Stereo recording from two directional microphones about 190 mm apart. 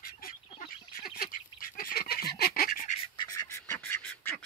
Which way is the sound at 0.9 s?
50° left (ahead or behind).